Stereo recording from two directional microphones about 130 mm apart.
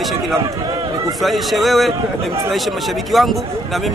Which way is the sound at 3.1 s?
Centre (ahead or behind).